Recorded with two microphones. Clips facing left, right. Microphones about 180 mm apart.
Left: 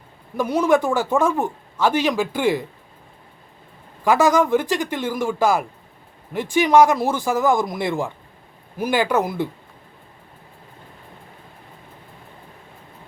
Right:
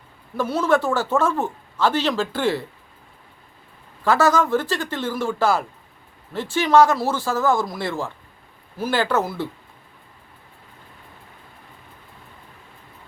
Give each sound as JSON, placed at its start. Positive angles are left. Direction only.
{"t": 0.3, "sound": "speech", "side_deg": 15}
{"t": 4.0, "sound": "speech", "side_deg": 15}